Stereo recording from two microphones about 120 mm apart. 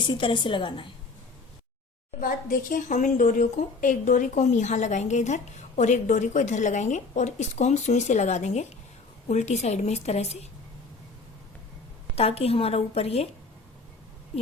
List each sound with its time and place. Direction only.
0.0 s a woman's voice: 40° left (ahead or behind)
2.9 s a woman's voice: 90° left; by 10.4 s 65° left (ahead or behind)
12.1 s a woman's voice: 60° left (ahead or behind)